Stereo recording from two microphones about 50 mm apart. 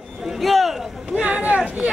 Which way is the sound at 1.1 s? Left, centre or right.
Right.